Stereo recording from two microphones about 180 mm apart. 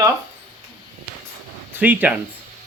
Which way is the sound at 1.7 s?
10° right (ahead or behind).